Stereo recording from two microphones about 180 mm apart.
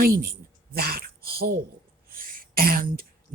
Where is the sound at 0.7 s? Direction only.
55° right (ahead or behind).